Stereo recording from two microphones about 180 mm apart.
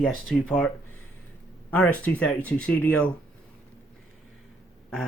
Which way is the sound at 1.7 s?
5° left (ahead or behind).